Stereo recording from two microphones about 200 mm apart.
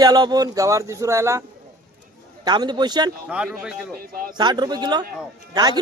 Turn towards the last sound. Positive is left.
turn(degrees=-20)  # may be behind; listen again after turning